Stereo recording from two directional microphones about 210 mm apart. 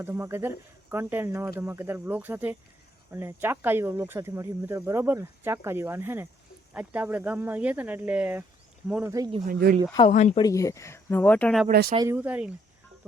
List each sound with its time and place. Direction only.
0.0 s speech: 10° right (ahead or behind)
9.5 s speech: 45° right (ahead or behind)
10.1 s speech: 35° left (ahead or behind)
10.4 s speech: 15° left (ahead or behind)
11.7 s speech: 45° right (ahead or behind)
11.9 s speech: 10° right (ahead or behind)